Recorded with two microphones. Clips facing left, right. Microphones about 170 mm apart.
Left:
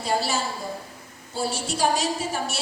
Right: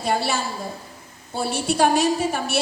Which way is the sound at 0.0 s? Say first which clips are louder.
Right 2 dB; 60° right (ahead or behind).